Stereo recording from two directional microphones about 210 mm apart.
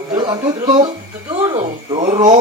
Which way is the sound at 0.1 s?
20° right (ahead or behind).